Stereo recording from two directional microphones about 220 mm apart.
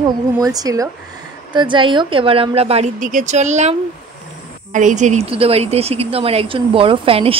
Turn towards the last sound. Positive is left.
turn(degrees=-25)  # may be behind; listen again after turning